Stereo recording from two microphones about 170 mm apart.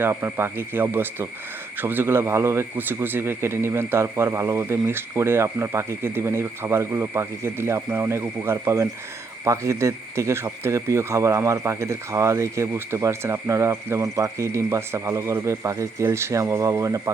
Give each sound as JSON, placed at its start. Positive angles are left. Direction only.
{"t": 0.0, "sound": "speech", "side_deg": -15}